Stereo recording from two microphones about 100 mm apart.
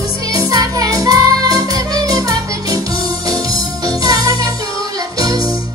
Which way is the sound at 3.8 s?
40° right (ahead or behind).